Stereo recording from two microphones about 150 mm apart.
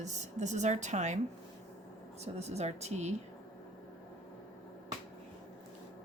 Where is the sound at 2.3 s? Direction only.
45° right (ahead or behind).